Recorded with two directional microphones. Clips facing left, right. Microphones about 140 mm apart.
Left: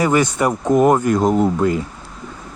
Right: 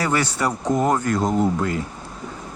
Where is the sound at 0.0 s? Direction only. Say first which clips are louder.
Left 6 dB; 15° left (ahead or behind).